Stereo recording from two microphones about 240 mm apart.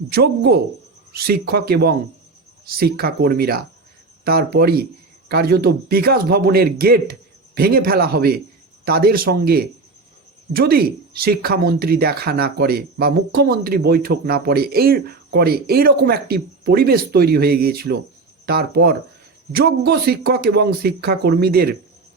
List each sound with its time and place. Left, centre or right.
0.1 s speech: right